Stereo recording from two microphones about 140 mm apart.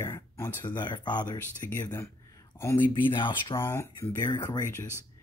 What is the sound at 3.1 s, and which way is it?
Speech, 35° left (ahead or behind).